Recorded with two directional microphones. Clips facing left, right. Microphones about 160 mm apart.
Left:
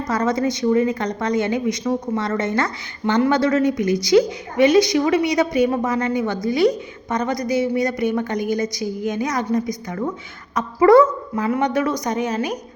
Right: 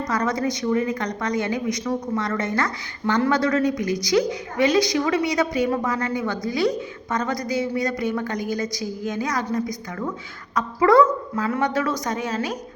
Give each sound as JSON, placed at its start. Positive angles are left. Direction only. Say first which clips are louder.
{"t": 0.1, "sound": "a woman's voice", "louder": "left 5 dB", "side_deg": 25}